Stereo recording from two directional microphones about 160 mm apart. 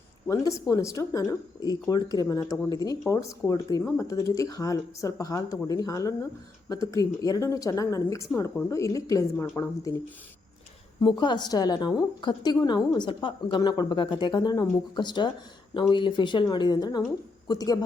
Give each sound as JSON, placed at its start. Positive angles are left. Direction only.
{"t": 0.3, "sound": "a woman's voice", "side_deg": 20}
{"t": 11.2, "sound": "a woman's voice", "side_deg": 30}